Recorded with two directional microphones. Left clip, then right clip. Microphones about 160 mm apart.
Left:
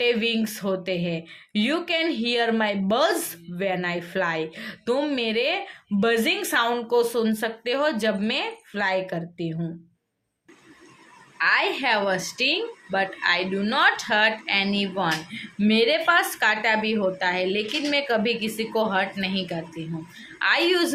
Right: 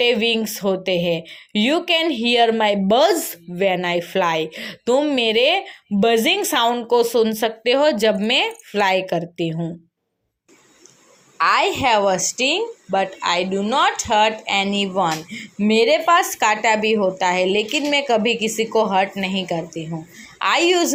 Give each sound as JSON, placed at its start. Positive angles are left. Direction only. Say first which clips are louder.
{"t": 0.0, "sound": "speech", "louder": "right 5 dB", "side_deg": -30}
{"t": 11.3, "sound": "speech", "louder": "right 5 dB", "side_deg": -35}